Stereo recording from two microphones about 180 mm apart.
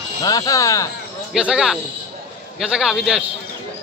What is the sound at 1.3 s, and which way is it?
Speech, 5° right (ahead or behind).